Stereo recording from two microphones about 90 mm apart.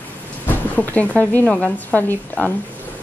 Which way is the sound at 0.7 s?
15° left (ahead or behind).